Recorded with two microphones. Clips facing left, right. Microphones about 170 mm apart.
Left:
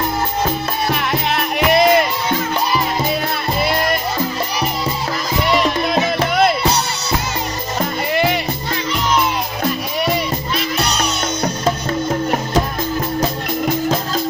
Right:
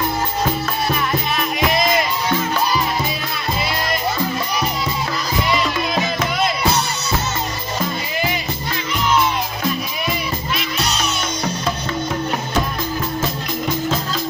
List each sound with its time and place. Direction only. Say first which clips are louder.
0.9 s music: left 2 dB; 65° left (ahead or behind)
11.4 s music: left 5 dB; 45° left (ahead or behind)